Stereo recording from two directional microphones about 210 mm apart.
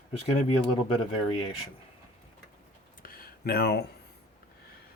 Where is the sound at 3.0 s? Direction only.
45° left (ahead or behind).